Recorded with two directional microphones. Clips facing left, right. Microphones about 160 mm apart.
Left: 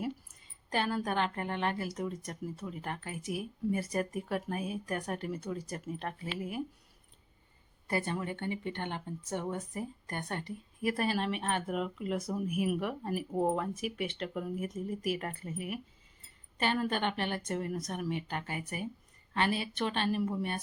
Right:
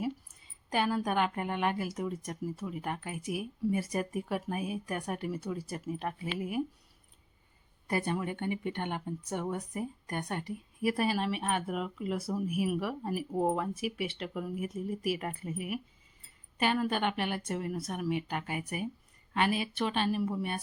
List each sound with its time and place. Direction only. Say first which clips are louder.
0.7 s speech: right 2 dB; 10° right (ahead or behind)
7.9 s speech: right 2 dB; 20° right (ahead or behind)
16.6 s speech: right 2 dB; 10° right (ahead or behind)